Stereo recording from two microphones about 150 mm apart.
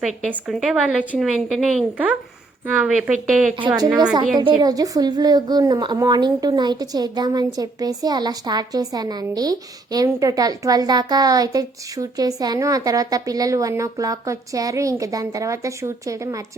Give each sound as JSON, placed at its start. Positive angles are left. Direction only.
{"t": 0.2, "sound": "a woman's voice", "side_deg": 5}
{"t": 4.4, "sound": "a woman's voice", "side_deg": -30}